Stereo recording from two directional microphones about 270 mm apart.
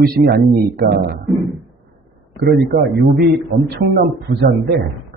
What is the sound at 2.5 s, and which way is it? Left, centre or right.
Speech, right.